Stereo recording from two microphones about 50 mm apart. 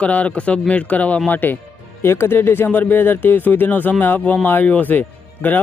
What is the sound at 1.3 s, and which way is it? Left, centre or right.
Speech, left.